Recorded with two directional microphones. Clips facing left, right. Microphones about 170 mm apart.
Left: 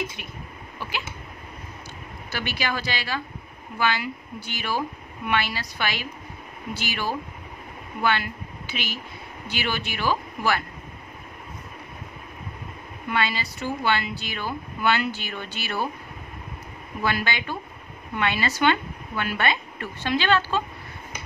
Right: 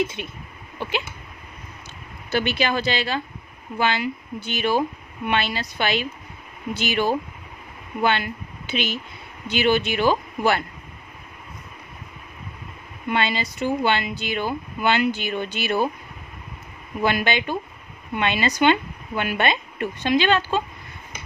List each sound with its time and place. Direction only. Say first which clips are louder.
0.0 s speech: right 7 dB; 25° right (ahead or behind)
0.7 s a sound: right 6 dB; 25° right (ahead or behind)
2.3 s speech: right 7 dB; 25° right (ahead or behind)
13.1 s speech: right 3 dB; 20° right (ahead or behind)
17.0 s speech: right 5 dB; 20° right (ahead or behind)